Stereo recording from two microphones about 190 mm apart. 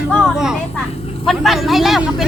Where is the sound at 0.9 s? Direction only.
30° left (ahead or behind).